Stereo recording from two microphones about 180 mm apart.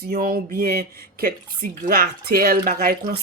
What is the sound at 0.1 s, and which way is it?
Speech, 50° right (ahead or behind).